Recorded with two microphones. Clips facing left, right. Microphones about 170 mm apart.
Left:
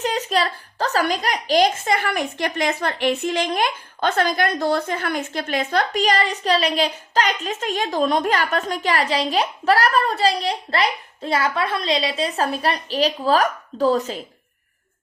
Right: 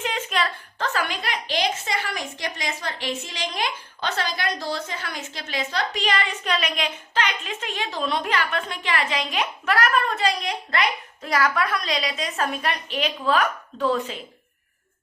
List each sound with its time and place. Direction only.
0.0 s a child's voice: 40° left (ahead or behind)